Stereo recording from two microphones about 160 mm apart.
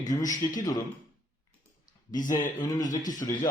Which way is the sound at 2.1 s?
55° left (ahead or behind).